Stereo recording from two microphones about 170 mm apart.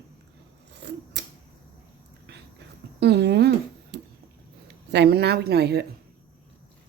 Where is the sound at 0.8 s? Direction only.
90° right.